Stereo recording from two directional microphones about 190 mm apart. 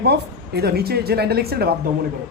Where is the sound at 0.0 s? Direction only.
60° right (ahead or behind).